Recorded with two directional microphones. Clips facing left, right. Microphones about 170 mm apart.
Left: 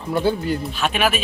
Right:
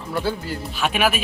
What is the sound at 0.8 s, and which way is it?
Speech, 10° right (ahead or behind).